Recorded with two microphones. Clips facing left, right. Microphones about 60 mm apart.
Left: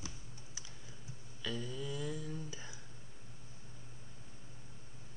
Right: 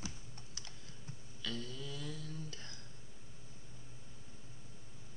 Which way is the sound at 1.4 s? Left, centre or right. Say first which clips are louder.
Left 3 dB; centre.